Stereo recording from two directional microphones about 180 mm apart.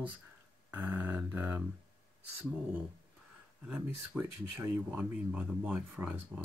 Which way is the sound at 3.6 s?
5° right (ahead or behind).